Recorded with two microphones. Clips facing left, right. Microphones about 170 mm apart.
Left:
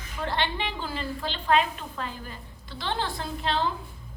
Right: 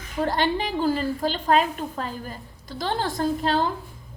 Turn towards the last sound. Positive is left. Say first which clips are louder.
# right 6 dB
turn(degrees=-45)  # may be behind; listen again after turning